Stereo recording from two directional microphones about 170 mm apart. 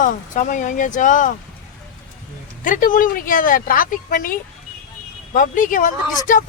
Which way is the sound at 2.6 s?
55° left (ahead or behind).